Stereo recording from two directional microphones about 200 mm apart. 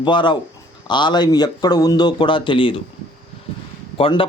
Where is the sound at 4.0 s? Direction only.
25° left (ahead or behind).